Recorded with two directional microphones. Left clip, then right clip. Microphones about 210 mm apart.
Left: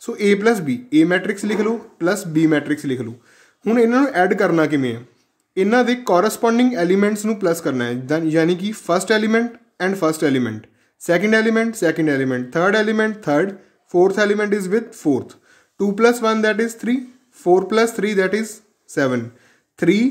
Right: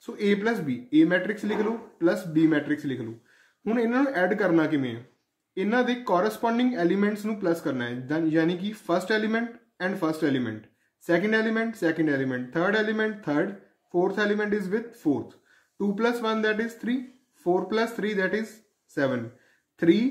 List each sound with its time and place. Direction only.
0.0 s speech: 50° left (ahead or behind)